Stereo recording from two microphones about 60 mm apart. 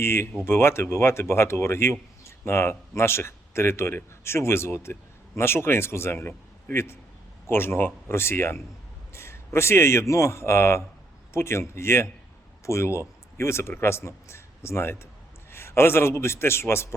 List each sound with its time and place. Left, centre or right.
0.0 s a man's voice: left